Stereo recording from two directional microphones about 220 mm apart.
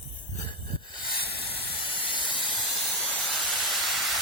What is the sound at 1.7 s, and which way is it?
Hiss, 25° left (ahead or behind).